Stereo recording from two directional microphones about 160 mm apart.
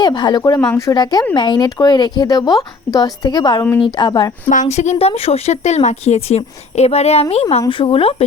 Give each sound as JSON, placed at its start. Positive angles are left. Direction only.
{"t": 0.0, "sound": "speech", "side_deg": 25}
{"t": 4.4, "sound": "speech", "side_deg": 50}